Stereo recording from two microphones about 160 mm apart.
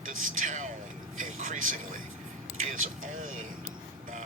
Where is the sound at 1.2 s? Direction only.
55° right (ahead or behind).